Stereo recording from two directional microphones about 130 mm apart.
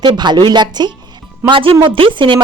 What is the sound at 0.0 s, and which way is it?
A woman's voice, 35° right (ahead or behind).